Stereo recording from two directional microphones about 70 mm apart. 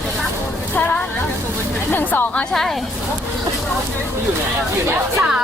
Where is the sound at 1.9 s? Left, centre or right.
Left.